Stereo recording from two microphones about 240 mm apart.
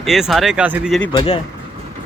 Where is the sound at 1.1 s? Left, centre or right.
Left.